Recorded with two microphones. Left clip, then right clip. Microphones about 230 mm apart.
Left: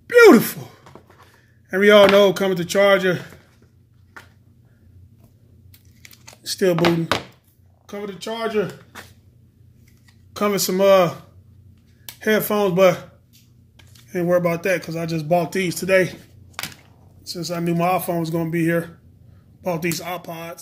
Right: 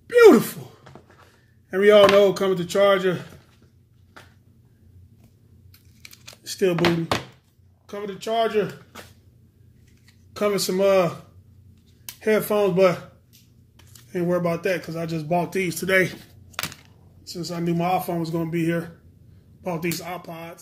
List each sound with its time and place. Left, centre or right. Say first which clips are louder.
0.0 s sigh: left 2 dB; left
1.7 s speech: left 2 dB; left
6.4 s a sound: left 3 dB; left
7.9 s speech: right 3 dB; left
10.3 s speech: left 2 dB; left
12.2 s speech: left 1 dB; left
14.1 s speech: left 4 dB; left; by 15.9 s centre
15.9 s speech: left 3 dB; centre
17.2 s speech: left 4 dB; left